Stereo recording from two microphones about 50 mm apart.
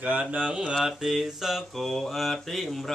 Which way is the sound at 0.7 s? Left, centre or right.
Centre.